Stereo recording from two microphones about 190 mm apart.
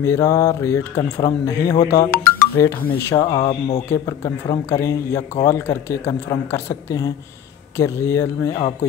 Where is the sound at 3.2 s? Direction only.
30° left (ahead or behind).